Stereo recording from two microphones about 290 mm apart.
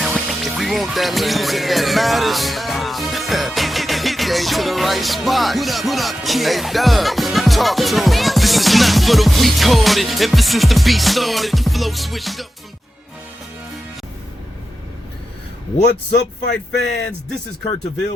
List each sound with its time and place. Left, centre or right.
0.0 s music: centre
16.1 s speech: left